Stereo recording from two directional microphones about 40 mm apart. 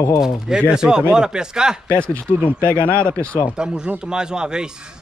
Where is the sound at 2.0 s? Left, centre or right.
Left.